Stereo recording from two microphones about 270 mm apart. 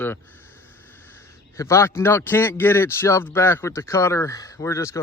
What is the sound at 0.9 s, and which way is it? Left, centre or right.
A man's voice, centre.